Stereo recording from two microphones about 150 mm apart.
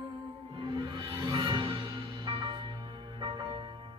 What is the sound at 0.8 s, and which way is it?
Music, 30° right (ahead or behind).